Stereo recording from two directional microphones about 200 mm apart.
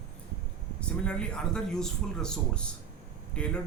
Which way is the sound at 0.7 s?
5° left (ahead or behind).